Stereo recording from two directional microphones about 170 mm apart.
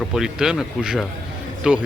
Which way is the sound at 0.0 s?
5° right (ahead or behind).